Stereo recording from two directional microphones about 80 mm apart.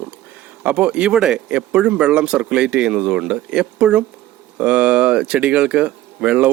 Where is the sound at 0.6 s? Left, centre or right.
Centre.